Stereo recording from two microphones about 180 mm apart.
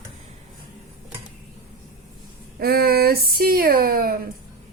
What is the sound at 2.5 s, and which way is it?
Speech, 55° right (ahead or behind).